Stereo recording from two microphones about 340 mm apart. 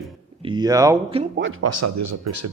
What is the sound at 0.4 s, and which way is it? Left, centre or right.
Speech, centre.